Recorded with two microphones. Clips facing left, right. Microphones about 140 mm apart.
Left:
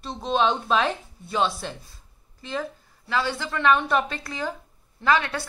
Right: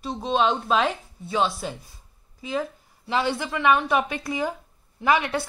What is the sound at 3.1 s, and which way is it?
A woman's voice, 20° right (ahead or behind).